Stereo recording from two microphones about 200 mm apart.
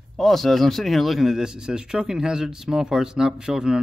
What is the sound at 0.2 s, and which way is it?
A man's voice, centre (ahead or behind).